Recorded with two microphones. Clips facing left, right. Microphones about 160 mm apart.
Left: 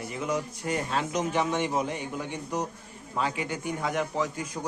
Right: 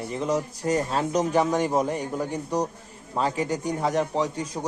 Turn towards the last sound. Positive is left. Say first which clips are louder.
# right 4 dB
turn(degrees=-35)  # may be behind; listen again after turning